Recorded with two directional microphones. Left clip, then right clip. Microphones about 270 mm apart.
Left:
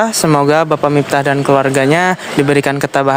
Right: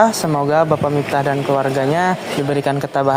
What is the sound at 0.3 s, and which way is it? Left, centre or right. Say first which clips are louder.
Speech: left 5 dB; left.